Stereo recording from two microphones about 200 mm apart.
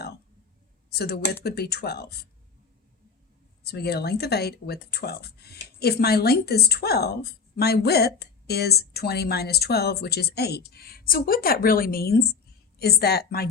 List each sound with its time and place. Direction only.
0.9 s a woman's voice: 50° left (ahead or behind)
3.6 s a woman's voice: 50° left (ahead or behind)